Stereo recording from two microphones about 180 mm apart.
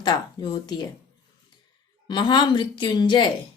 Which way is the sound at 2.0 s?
25° left (ahead or behind).